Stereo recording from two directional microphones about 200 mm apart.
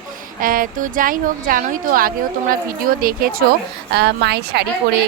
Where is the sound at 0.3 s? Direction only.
45° right (ahead or behind).